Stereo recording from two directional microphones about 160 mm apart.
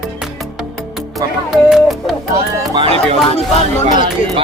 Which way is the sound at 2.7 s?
40° right (ahead or behind).